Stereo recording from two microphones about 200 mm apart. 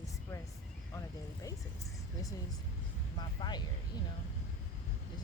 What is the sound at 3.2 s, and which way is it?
Speech, 20° left (ahead or behind).